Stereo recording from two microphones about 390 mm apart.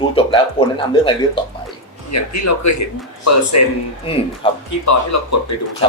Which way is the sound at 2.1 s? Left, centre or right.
Left.